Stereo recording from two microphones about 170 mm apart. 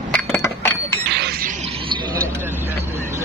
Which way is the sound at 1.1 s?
70° right (ahead or behind).